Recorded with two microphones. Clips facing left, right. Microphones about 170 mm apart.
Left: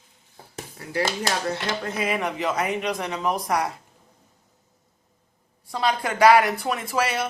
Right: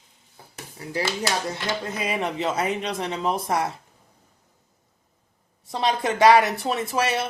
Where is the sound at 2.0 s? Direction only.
30° right (ahead or behind).